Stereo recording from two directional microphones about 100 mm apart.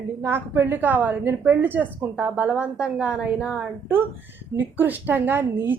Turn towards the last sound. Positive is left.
turn(degrees=-20)  # may be behind; listen again after turning